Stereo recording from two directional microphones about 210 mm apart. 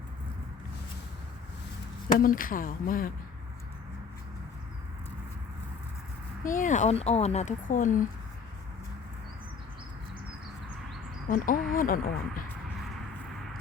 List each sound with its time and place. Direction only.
2.1 s speech: 40° left (ahead or behind)
6.4 s speech: 40° left (ahead or behind)
11.3 s speech: 40° left (ahead or behind)